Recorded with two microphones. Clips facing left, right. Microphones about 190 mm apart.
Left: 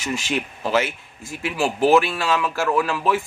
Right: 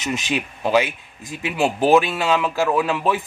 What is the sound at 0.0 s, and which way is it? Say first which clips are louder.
A man's voice: right 1 dB; 20° right (ahead or behind).